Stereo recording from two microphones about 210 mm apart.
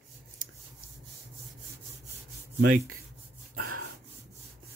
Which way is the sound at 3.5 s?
85° right.